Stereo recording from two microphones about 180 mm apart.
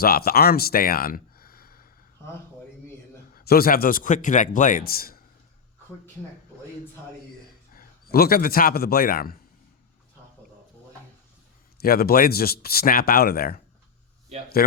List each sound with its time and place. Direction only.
0.0 s speech: 55° left (ahead or behind)
3.3 s a man's voice: 55° left (ahead or behind)
7.8 s a man's voice: 55° left (ahead or behind)
11.8 s speech: 55° left (ahead or behind)